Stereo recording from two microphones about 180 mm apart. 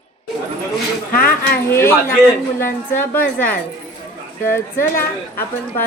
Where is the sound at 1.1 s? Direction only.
50° left (ahead or behind).